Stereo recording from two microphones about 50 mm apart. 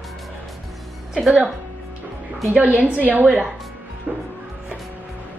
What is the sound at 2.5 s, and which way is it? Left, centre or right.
Speech, right.